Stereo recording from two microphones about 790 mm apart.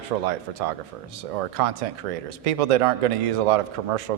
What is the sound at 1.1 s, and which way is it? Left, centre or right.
Speech, right.